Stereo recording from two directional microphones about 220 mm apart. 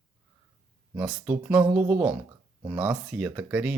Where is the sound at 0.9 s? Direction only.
5° right (ahead or behind).